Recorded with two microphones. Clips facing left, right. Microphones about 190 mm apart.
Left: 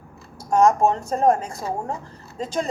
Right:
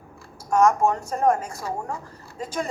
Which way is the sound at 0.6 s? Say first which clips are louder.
Left 2 dB; 25° left (ahead or behind).